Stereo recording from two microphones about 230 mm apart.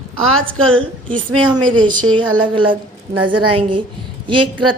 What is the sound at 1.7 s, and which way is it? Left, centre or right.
A woman's voice, centre.